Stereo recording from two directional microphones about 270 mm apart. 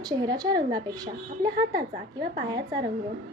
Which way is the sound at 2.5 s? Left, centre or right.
Centre.